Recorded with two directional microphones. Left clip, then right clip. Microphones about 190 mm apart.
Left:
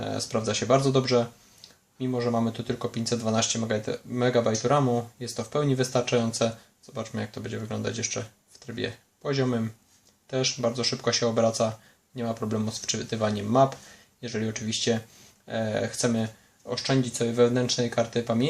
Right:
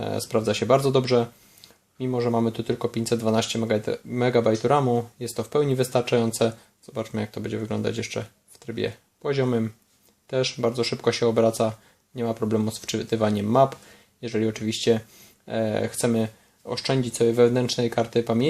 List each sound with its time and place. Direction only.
0.0 s speech: 40° right (ahead or behind)